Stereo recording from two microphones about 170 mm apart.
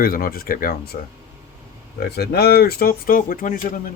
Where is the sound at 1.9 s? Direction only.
70° left (ahead or behind); by 3.6 s 50° left (ahead or behind).